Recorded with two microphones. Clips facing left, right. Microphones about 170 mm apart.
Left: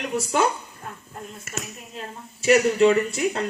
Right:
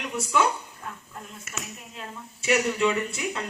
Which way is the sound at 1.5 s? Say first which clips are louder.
Left 4 dB; 40° left (ahead or behind).